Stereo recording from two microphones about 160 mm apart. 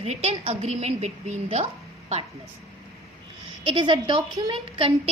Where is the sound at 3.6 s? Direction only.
30° right (ahead or behind).